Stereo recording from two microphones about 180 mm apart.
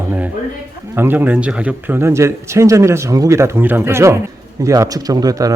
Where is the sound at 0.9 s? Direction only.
10° right (ahead or behind).